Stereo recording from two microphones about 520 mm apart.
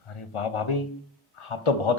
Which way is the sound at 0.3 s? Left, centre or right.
Left.